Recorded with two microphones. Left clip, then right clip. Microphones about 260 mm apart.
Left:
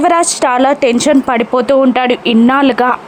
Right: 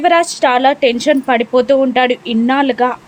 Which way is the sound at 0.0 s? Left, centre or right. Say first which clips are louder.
Left 1 dB; centre.